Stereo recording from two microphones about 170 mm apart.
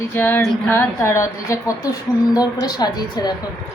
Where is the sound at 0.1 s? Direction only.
15° left (ahead or behind).